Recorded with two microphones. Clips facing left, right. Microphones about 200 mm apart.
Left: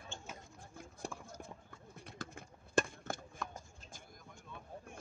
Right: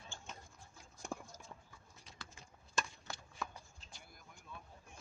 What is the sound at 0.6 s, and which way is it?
Clip-clop, 60° left (ahead or behind).